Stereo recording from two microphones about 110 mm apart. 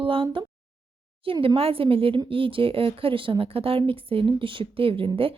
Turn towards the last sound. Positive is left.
turn(degrees=-55)  # may be behind; listen again after turning